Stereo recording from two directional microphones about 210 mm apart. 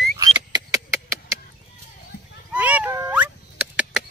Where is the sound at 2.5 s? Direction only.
5° right (ahead or behind).